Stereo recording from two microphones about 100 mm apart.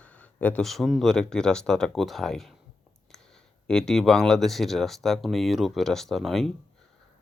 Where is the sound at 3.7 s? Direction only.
5° left (ahead or behind).